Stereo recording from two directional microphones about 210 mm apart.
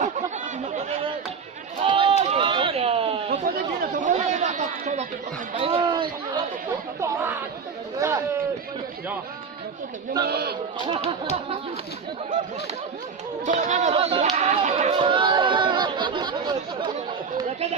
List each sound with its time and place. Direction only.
0.0 s chatter: 30° right (ahead or behind)
1.8 s a sound: 25° right (ahead or behind)
3.5 s chatter: 45° right (ahead or behind)
3.9 s chatter: 35° right (ahead or behind)
5.5 s a sound: 25° right (ahead or behind)
7.9 s chatter: 15° right (ahead or behind)
10.2 s speech: 50° right (ahead or behind)
13.4 s chatter: 35° right (ahead or behind); by 16.9 s 20° right (ahead or behind)